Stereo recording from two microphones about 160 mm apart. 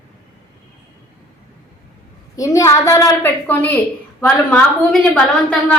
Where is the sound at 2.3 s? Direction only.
20° left (ahead or behind).